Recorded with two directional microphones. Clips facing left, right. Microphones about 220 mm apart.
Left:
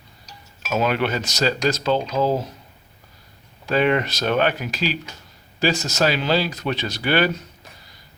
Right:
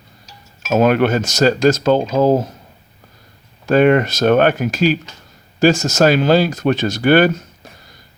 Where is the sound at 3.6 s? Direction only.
50° right (ahead or behind).